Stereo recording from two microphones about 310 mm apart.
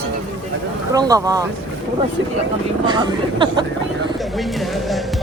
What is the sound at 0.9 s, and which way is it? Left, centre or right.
Speech, centre.